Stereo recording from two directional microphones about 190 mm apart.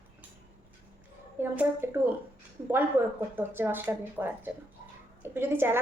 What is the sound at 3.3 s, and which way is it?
A woman's voice, 10° right (ahead or behind).